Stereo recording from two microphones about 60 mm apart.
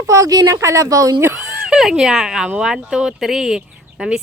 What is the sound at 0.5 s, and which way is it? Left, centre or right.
Speech, right.